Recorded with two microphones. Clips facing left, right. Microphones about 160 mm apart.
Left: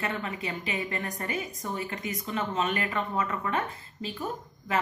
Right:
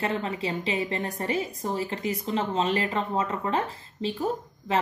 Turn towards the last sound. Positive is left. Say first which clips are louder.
# right 6 dB
turn(degrees=-30)  # may be behind; listen again after turning